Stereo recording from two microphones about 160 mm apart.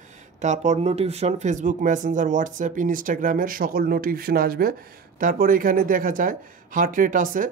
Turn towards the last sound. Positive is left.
turn(degrees=-55)  # may be behind; listen again after turning